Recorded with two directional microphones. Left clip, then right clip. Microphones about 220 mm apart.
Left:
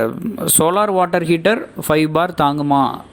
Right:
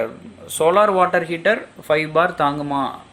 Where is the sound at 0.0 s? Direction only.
45° left (ahead or behind).